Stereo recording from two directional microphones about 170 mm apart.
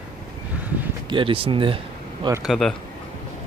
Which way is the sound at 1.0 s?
30° right (ahead or behind).